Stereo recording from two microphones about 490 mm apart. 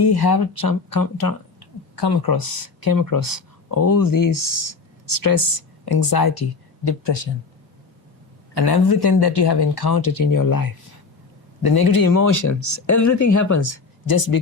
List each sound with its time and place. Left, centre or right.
0.0 s speech: left
8.5 s speech: left